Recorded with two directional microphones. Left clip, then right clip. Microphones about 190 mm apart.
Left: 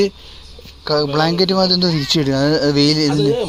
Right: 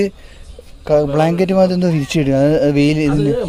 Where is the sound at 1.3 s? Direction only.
30° right (ahead or behind).